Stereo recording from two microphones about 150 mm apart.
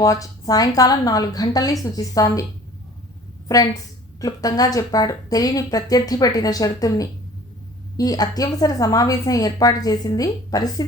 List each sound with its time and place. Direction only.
0.0 s speech: 25° left (ahead or behind)
4.2 s speech: 25° left (ahead or behind)